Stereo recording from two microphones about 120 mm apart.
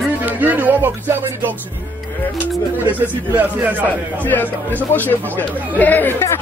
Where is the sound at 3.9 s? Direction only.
15° left (ahead or behind).